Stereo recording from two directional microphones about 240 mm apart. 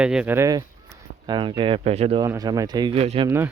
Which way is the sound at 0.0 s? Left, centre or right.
Centre.